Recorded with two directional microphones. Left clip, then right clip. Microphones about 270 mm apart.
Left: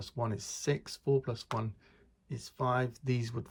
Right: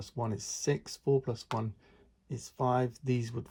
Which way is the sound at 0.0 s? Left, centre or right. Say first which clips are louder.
Even; centre.